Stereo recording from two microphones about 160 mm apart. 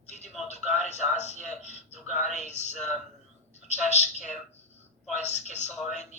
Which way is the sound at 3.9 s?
45° left (ahead or behind).